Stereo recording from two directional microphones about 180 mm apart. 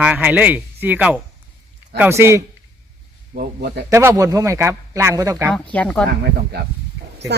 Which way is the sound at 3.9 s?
15° right (ahead or behind).